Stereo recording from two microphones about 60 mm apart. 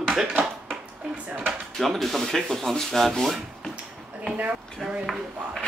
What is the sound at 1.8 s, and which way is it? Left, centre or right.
Speech, centre.